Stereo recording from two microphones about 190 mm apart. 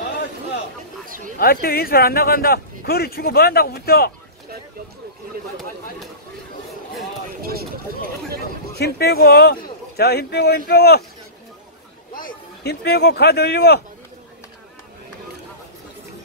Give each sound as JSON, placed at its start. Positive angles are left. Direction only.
{"t": 1.0, "sound": "a sound", "side_deg": -45}
{"t": 1.4, "sound": "speech", "side_deg": 50}
{"t": 8.7, "sound": "speech", "side_deg": 55}
{"t": 12.2, "sound": "speech", "side_deg": 55}